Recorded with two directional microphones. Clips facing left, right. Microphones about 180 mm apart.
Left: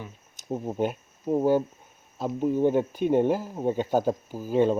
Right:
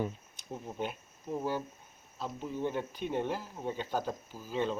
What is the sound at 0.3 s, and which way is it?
Speech, 50° left (ahead or behind).